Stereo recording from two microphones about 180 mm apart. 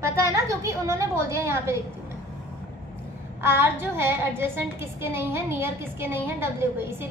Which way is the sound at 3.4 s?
15° right (ahead or behind).